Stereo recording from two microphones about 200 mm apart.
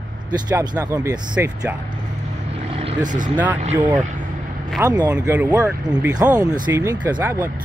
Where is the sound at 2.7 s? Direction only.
30° right (ahead or behind).